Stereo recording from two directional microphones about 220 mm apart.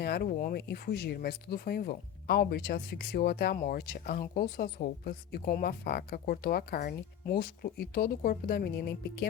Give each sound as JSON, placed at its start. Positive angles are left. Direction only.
{"t": 0.0, "sound": "speech", "side_deg": 45}